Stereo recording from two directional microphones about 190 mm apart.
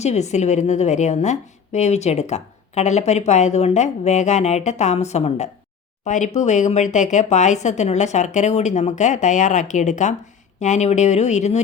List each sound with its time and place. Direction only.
0.0 s a woman's voice: 35° left (ahead or behind)